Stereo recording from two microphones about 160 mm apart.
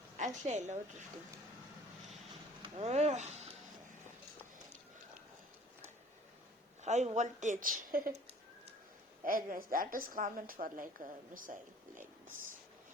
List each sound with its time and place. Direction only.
0.4 s speech: 45° right (ahead or behind)
2.6 s speech: 40° right (ahead or behind)
6.8 s speech: 45° right (ahead or behind)
7.8 s a woman's voice: 60° right (ahead or behind)
9.2 s a woman's voice: 60° right (ahead or behind)